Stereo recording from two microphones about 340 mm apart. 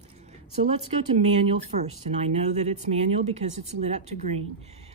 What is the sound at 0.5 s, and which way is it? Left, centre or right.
Speech, centre.